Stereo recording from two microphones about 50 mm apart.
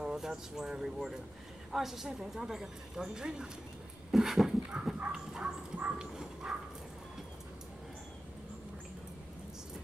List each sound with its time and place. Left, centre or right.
0.0 s a woman's voice: centre
4.1 s dog: centre
5.8 s horse: centre